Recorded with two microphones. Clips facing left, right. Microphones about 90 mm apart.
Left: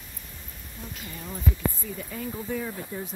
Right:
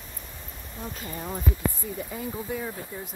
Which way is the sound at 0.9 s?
35° right (ahead or behind).